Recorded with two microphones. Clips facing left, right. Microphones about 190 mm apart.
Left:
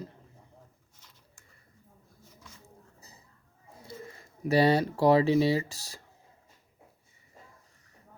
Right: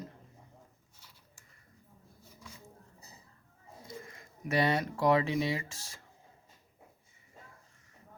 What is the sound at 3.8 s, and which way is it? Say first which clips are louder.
Speech: left 3 dB; 30° left (ahead or behind).